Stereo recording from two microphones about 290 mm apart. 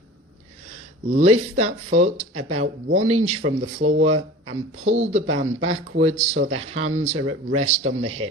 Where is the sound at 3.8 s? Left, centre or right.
Right.